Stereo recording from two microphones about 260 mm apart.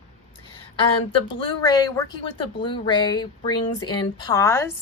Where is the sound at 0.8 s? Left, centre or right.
Centre.